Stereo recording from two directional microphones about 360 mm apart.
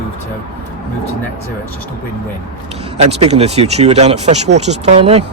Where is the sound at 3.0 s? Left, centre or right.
Centre.